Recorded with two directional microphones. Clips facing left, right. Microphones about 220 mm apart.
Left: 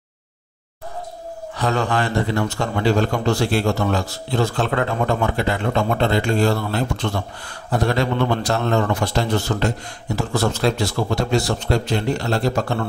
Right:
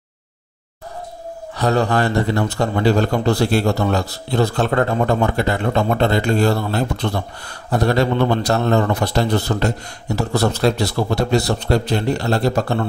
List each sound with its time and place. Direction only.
1.6 s a man's voice: 40° right (ahead or behind)